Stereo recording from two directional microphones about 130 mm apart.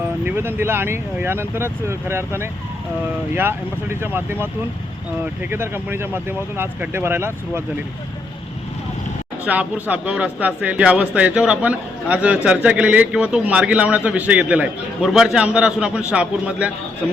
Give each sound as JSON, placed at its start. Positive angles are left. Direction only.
{"t": 0.3, "sound": "a man's voice", "side_deg": -15}
{"t": 9.4, "sound": "a man's voice", "side_deg": -10}